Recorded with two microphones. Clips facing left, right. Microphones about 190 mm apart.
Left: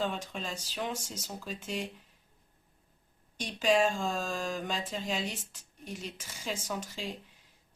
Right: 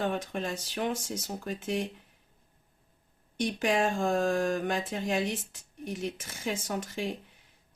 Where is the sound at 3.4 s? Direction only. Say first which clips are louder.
Even; 60° right (ahead or behind).